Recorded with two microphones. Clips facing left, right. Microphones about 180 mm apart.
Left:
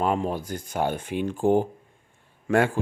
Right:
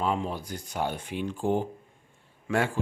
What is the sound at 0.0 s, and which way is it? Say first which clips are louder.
Speech: left 4 dB; 50° left (ahead or behind).